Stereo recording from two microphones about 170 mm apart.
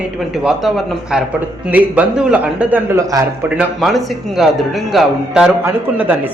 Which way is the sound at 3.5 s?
Centre (ahead or behind).